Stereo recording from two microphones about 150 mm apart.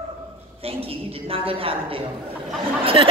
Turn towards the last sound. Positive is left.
turn(degrees=-35)  # may be behind; listen again after turning